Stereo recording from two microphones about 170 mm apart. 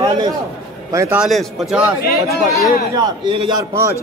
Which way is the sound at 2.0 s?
65° left (ahead or behind).